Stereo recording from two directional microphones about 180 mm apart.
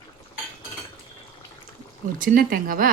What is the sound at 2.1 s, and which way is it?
Speech, 50° right (ahead or behind).